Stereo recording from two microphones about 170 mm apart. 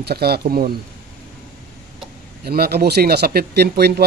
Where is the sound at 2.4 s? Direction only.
65° right (ahead or behind).